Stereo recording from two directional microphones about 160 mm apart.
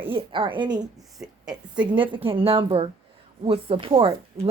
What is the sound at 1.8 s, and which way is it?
A woman's voice, 30° right (ahead or behind).